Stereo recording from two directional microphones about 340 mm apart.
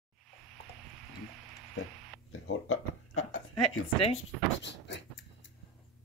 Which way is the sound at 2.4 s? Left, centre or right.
Left.